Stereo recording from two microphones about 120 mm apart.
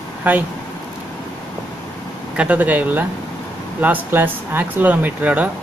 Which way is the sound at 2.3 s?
10° right (ahead or behind).